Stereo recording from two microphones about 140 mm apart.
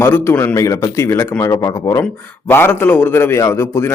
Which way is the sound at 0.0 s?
15° left (ahead or behind).